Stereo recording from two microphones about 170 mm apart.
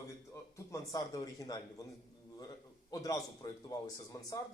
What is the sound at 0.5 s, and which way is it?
Speech, 20° left (ahead or behind).